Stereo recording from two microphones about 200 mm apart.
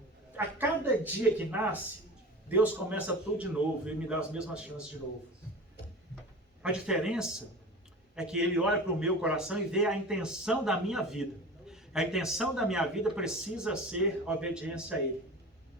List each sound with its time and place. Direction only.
0.3 s a man's voice: 10° right (ahead or behind)
6.6 s a man's voice: 5° right (ahead or behind)